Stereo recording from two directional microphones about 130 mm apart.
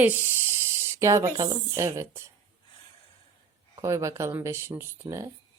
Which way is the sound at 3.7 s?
25° right (ahead or behind).